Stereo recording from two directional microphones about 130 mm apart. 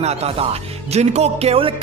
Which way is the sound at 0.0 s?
55° right (ahead or behind).